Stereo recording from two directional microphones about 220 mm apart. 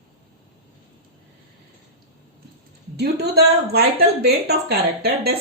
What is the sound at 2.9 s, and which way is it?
Speech, 45° right (ahead or behind).